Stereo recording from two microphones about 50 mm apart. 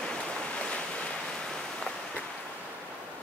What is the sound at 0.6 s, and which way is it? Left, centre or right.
Waves, left.